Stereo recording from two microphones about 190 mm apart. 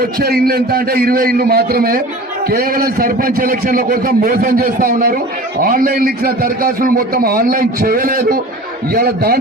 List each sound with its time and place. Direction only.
0.2 s a man's voice: 55° right (ahead or behind)